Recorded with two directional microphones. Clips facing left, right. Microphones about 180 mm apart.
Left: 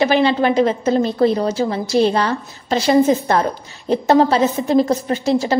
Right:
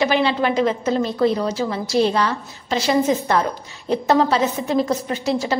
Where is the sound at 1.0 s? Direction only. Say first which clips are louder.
Left 1 dB; 30° left (ahead or behind).